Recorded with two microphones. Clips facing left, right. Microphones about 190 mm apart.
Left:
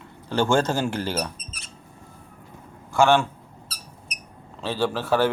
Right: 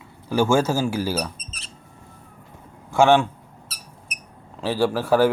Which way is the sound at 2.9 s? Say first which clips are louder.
Right 2 dB; 20° right (ahead or behind).